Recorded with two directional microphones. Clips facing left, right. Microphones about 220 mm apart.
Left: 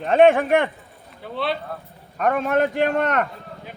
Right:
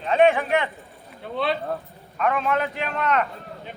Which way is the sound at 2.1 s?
45° left (ahead or behind).